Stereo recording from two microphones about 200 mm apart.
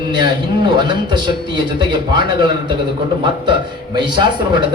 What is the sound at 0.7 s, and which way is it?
A man's voice, 20° right (ahead or behind).